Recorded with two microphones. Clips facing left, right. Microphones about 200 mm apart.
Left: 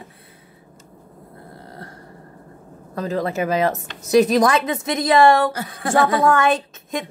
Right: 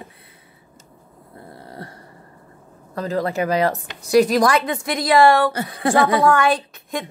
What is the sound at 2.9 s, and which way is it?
A woman's voice, 20° left (ahead or behind).